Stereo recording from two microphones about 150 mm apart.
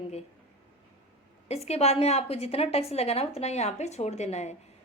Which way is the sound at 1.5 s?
45° left (ahead or behind).